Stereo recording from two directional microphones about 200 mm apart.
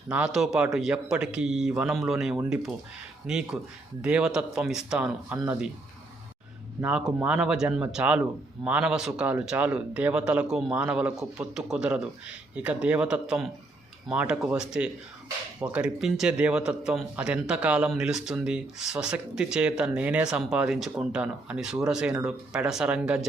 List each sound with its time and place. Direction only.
0.1 s a man's voice: 5° right (ahead or behind)
7.0 s a man's voice: 5° right (ahead or behind)